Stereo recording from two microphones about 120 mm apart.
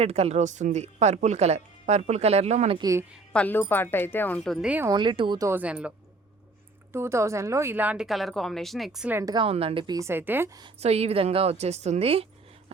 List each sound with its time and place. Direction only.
0.0 s speech: 60° right (ahead or behind)
2.7 s speech: 30° right (ahead or behind)
3.3 s speech: 15° left (ahead or behind)
4.6 s a woman's voice: 10° right (ahead or behind)
4.9 s speech: 40° right (ahead or behind)
5.4 s a woman's voice: 20° right (ahead or behind)
5.6 s a woman's voice: 10° right (ahead or behind)
6.9 s a woman's voice: 20° right (ahead or behind)
8.0 s a woman's voice: centre (ahead or behind)
9.2 s speech: 40° right (ahead or behind)
9.5 s a woman's voice: 50° right (ahead or behind)
9.8 s speech: 35° right (ahead or behind)
10.1 s a woman's voice: 15° right (ahead or behind)
10.8 s speech: 60° right (ahead or behind)